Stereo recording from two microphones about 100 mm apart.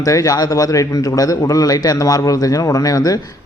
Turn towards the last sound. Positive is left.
turn(degrees=35)  # may be behind; listen again after turning